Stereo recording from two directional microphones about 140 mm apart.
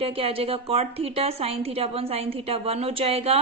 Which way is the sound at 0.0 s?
40° right (ahead or behind).